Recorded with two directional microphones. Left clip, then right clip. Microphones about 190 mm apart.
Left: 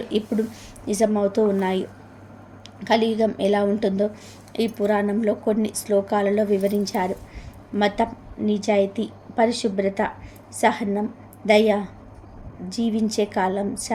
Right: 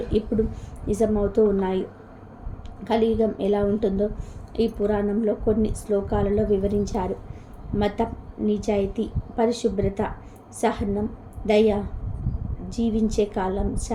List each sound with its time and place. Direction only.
0.9 s a woman's voice: 15° left (ahead or behind)
2.8 s a woman's voice: 15° left (ahead or behind)